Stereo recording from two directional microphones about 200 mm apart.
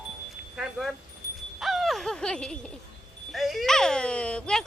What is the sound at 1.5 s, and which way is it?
Owl, centre (ahead or behind).